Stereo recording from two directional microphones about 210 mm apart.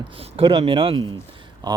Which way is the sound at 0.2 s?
25° right (ahead or behind).